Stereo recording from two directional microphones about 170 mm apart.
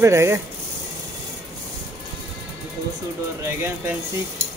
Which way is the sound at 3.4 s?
15° right (ahead or behind).